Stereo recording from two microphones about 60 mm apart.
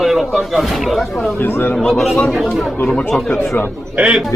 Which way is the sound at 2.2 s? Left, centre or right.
Centre.